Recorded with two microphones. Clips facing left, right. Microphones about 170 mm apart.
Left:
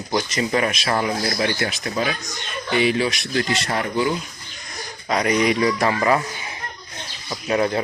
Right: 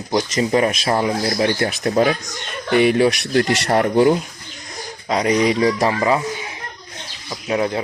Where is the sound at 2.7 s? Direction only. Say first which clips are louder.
Right 6 dB; 55° right (ahead or behind).